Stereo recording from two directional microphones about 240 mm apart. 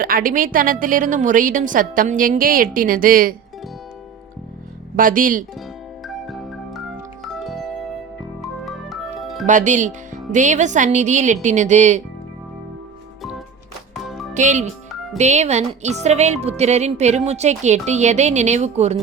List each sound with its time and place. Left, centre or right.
0.0 s a woman's voice: right
4.9 s a woman's voice: right
6.1 s music: centre
9.5 s a woman's voice: right
13.9 s music: centre
14.3 s a woman's voice: right